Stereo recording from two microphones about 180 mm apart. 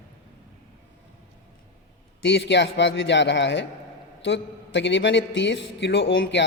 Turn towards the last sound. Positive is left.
turn(degrees=75)  # may be behind; listen again after turning